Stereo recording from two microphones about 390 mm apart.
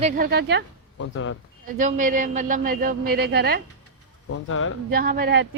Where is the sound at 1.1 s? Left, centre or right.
Left.